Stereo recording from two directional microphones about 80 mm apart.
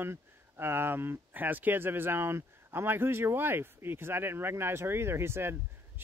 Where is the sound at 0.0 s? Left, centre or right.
Right.